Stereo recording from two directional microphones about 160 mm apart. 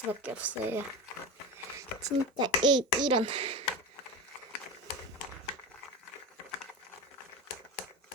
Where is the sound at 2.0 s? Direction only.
25° right (ahead or behind).